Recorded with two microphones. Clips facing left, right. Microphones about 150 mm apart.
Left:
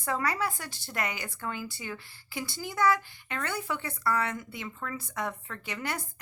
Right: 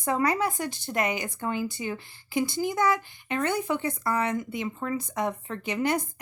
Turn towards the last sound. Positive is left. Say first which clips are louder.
# right 9 dB
turn(degrees=-20)  # may be behind; listen again after turning